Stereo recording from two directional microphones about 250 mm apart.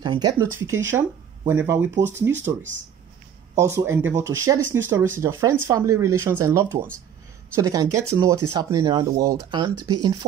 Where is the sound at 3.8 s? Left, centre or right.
Centre.